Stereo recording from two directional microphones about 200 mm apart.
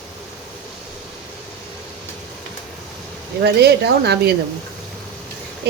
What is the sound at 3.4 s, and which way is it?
Speech, 55° right (ahead or behind).